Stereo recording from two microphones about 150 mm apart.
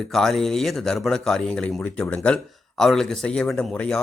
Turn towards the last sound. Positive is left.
turn(degrees=5)  # may be behind; listen again after turning